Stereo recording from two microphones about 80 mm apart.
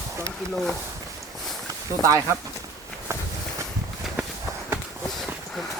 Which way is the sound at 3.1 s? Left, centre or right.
Right.